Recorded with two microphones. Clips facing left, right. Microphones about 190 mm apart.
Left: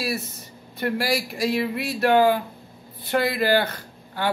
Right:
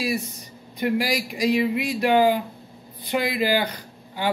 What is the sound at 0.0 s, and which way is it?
Speech, 15° right (ahead or behind).